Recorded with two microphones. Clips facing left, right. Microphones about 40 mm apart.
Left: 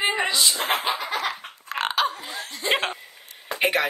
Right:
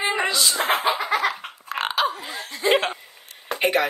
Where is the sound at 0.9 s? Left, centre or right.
Centre.